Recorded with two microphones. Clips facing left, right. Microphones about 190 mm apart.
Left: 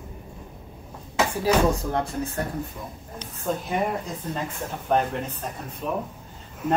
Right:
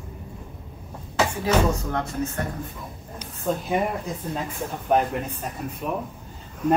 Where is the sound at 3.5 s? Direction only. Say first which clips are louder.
Right 2 dB; centre (ahead or behind).